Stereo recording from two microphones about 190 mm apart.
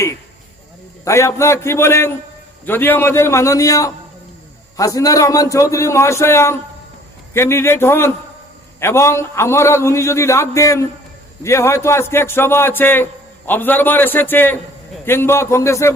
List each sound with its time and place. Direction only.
1.0 s a man's voice: 15° left (ahead or behind)